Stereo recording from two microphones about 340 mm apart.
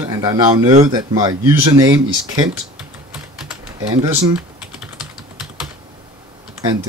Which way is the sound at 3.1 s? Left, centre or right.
Centre.